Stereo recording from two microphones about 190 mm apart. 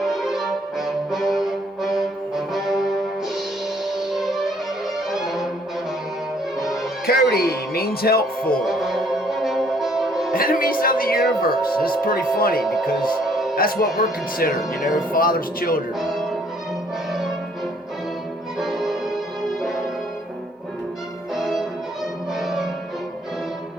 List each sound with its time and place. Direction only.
0.0 s music: centre (ahead or behind)
7.1 s speech: 55° left (ahead or behind)
8.6 s music: centre (ahead or behind)
10.3 s speech: 50° left (ahead or behind)
12.6 s speech: centre (ahead or behind)
13.2 s music: centre (ahead or behind)
13.6 s speech: 50° left (ahead or behind)
14.8 s speech: centre (ahead or behind)
15.1 s speech: 50° left (ahead or behind)
16.0 s music: centre (ahead or behind)
18.6 s music: centre (ahead or behind)
21.3 s music: centre (ahead or behind)